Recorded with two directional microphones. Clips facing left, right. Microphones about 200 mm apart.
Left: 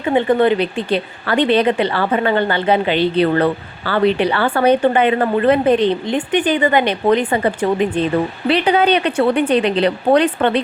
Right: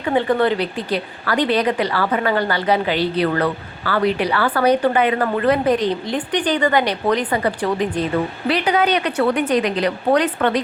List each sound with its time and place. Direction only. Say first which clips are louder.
0.0 s a woman's voice: left 3 dB; 20° left (ahead or behind)